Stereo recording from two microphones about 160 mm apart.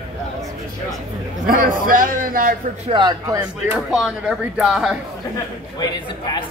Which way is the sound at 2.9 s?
25° right (ahead or behind).